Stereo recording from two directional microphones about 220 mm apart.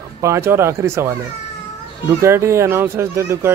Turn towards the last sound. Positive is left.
turn(degrees=-10)  # may be behind; listen again after turning